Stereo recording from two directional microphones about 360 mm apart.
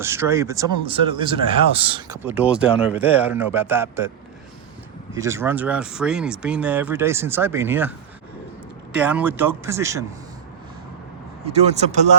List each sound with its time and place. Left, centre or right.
0.0 s speech: centre
5.1 s speech: centre
9.0 s speech: centre
11.4 s speech: centre